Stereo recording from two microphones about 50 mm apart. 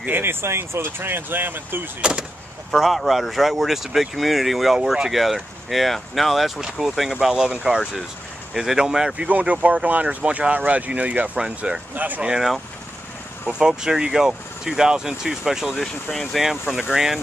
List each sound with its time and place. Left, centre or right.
0.1 s speech: right
2.0 s speech: centre
2.7 s speech: centre
8.5 s speech: centre
9.3 s speech: right
11.3 s speech: centre
11.9 s speech: right
13.5 s speech: centre
15.8 s speech: centre
16.3 s speech: centre